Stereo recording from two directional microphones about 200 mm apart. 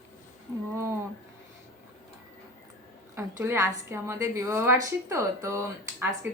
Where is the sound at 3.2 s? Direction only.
15° right (ahead or behind).